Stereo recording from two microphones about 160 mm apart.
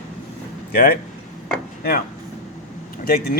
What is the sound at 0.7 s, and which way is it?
Speech, 70° left (ahead or behind).